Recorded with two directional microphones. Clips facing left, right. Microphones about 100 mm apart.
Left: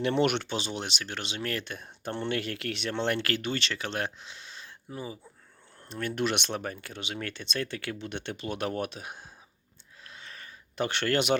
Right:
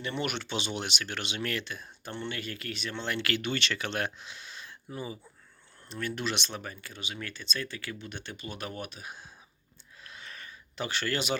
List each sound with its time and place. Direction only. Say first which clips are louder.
0.0 s speech: left 8 dB; 75° left (ahead or behind)
0.4 s speech: left 1 dB; 35° left (ahead or behind)
1.6 s speech: left 4 dB; 55° left (ahead or behind)
3.2 s speech: even; 40° left (ahead or behind)
5.8 s speech: left 4 dB; 50° left (ahead or behind)
10.0 s a sound: even; 30° left (ahead or behind)
10.8 s speech: left 5 dB; 60° left (ahead or behind)